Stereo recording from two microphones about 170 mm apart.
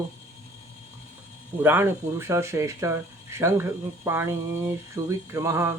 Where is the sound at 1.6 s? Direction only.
15° right (ahead or behind).